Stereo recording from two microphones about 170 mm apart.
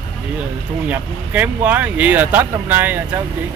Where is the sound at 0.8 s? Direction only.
10° right (ahead or behind).